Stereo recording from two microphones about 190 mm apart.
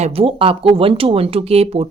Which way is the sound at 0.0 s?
30° right (ahead or behind).